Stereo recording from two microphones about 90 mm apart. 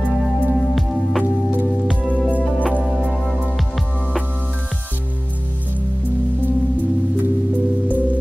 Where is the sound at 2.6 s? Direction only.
10° right (ahead or behind).